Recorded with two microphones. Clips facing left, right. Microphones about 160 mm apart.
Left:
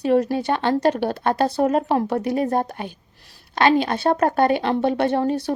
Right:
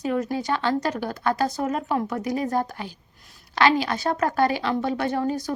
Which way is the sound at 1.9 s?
30° left (ahead or behind).